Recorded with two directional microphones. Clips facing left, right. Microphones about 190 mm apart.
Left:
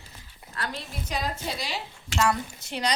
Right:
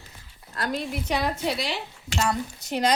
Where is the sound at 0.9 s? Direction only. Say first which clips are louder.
Right 5 dB; 65° right (ahead or behind).